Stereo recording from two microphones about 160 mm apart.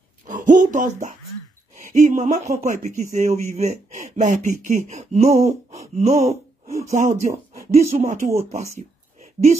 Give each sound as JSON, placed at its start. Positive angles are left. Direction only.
{"t": 0.3, "sound": "speech", "side_deg": -50}